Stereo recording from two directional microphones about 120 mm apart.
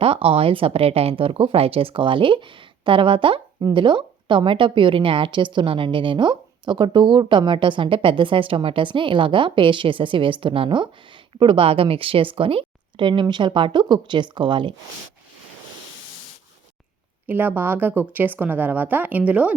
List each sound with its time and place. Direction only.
0.0 s speech: 50° right (ahead or behind)
17.2 s a woman's voice: 15° right (ahead or behind)